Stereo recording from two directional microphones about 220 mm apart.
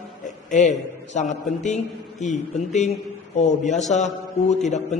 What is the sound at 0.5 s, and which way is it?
A man's voice, 35° left (ahead or behind).